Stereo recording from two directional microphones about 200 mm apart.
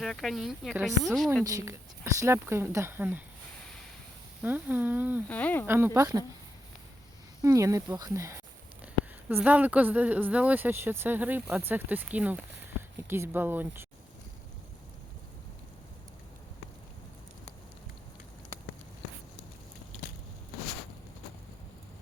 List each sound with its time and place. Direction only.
0.0 s speech: centre (ahead or behind)
1.5 s speech: 15° right (ahead or behind)
4.4 s speech: 10° right (ahead or behind)
5.3 s speech: 10° left (ahead or behind)
5.6 s speech: 10° right (ahead or behind)
7.4 s speech: 15° right (ahead or behind)